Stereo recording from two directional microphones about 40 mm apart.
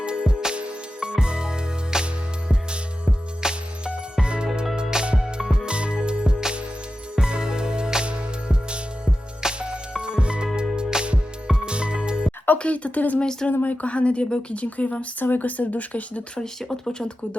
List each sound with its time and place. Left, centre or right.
0.0 s music: right
3.4 s music: centre
12.5 s a woman's voice: left
13.1 s speech: left
13.5 s speech: left
13.8 s a woman's voice: left
15.2 s speech: left
16.4 s speech: centre